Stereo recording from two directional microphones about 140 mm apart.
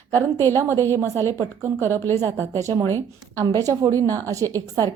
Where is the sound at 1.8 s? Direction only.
15° left (ahead or behind).